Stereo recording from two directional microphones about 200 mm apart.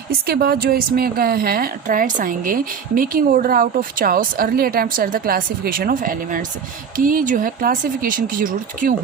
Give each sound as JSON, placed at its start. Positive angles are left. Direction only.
{"t": 0.1, "sound": "a woman's voice", "side_deg": -50}